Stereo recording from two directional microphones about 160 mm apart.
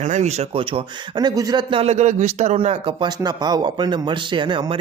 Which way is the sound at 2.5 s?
35° right (ahead or behind).